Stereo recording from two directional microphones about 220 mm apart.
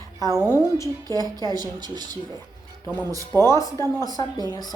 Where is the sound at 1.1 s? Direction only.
15° right (ahead or behind).